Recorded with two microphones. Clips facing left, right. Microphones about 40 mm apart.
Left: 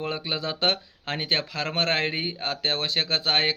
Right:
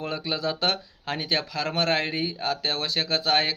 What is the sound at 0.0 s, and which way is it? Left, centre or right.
Speech, left.